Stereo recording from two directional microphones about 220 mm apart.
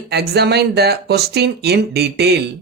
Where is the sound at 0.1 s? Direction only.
50° right (ahead or behind).